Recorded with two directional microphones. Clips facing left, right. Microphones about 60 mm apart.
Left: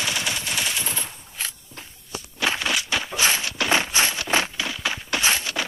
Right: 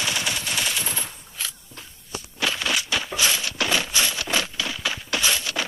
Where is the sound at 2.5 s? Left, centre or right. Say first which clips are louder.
Left 1 dB; left.